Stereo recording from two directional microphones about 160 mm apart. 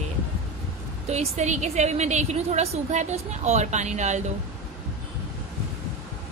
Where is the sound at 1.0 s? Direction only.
45° right (ahead or behind).